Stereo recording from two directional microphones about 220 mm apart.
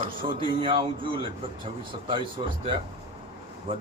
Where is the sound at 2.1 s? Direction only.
20° right (ahead or behind).